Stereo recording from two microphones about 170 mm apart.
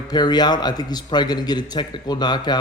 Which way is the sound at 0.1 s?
25° left (ahead or behind).